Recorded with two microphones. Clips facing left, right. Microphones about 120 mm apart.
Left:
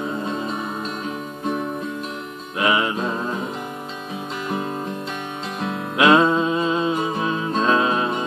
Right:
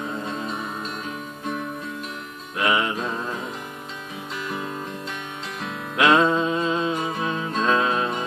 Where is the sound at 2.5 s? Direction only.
5° left (ahead or behind).